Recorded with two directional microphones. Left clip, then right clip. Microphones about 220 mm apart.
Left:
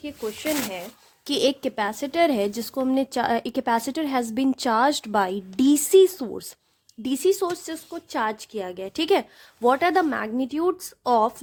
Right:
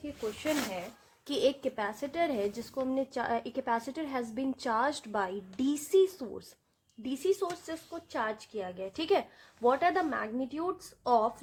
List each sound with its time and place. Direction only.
1.2 s a woman's voice: 45° left (ahead or behind)